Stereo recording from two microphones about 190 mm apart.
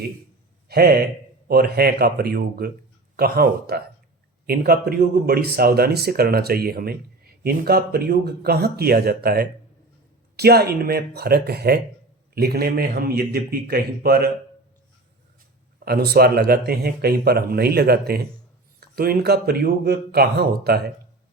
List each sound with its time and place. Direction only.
0.7 s a man's voice: 55° right (ahead or behind)
15.8 s a man's voice: 55° right (ahead or behind)